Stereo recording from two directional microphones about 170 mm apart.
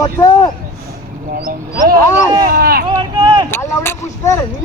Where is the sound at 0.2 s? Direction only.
20° left (ahead or behind).